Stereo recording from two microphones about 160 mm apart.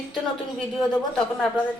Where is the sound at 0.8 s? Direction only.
5° left (ahead or behind).